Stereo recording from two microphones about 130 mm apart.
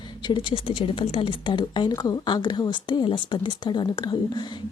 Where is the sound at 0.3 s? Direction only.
40° left (ahead or behind).